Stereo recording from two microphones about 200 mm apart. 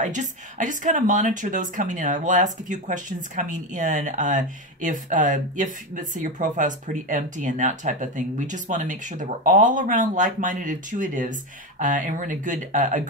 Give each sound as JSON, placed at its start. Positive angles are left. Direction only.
{"t": 0.0, "sound": "speech", "side_deg": -40}